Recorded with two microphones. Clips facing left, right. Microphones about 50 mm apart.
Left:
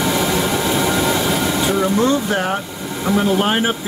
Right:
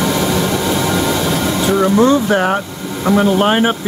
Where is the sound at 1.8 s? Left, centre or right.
Centre.